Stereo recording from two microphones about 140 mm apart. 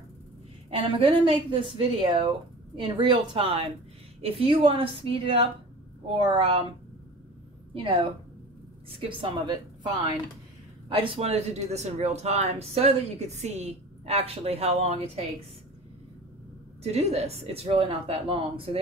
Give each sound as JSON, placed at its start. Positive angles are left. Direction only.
{"t": 0.7, "sound": "speech", "side_deg": -40}
{"t": 7.7, "sound": "a woman's voice", "side_deg": -40}
{"t": 9.0, "sound": "speech", "side_deg": -40}
{"t": 10.9, "sound": "speech", "side_deg": -40}
{"t": 16.8, "sound": "speech", "side_deg": -50}